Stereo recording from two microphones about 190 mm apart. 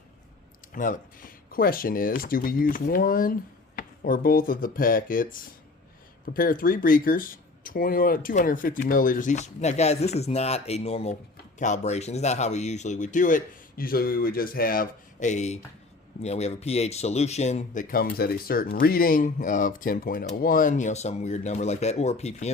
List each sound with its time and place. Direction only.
0.7 s speech: 45° left (ahead or behind)